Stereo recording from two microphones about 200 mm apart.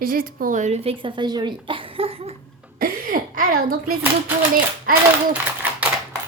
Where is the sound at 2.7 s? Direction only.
45° right (ahead or behind).